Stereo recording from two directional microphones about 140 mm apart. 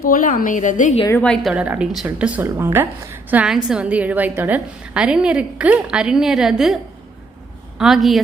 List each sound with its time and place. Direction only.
0.0 s a woman's voice: 80° left; by 0.9 s 65° left (ahead or behind)
1.2 s a woman's voice: 5° left (ahead or behind)
7.8 s speech: centre (ahead or behind)